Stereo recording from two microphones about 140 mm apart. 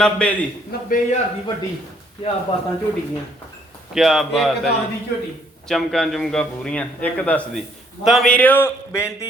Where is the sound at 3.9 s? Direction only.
Centre (ahead or behind).